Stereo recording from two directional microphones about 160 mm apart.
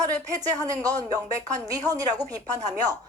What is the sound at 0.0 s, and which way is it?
A woman's voice, 25° right (ahead or behind).